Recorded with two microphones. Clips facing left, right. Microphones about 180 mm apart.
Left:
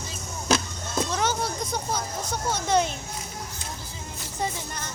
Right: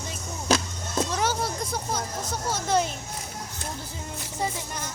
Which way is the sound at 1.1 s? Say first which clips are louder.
Even; 10° right (ahead or behind).